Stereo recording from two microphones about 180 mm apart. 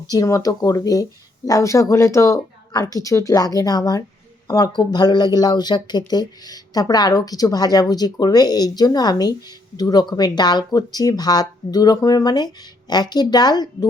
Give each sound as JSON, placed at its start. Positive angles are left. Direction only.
{"t": 0.1, "sound": "speech", "side_deg": 20}